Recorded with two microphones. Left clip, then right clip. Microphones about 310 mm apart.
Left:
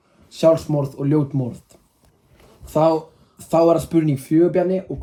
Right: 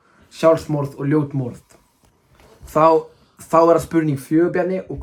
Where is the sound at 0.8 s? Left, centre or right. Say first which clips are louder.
Right 1 dB; centre.